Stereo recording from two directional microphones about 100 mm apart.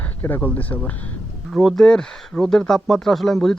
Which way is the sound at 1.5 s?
Centre (ahead or behind).